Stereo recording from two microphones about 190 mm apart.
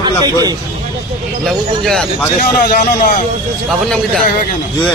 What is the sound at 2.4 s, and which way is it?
Speech, 50° left (ahead or behind).